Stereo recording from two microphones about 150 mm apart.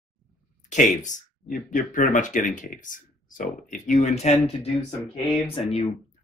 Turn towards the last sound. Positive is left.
turn(degrees=45)  # may be behind; listen again after turning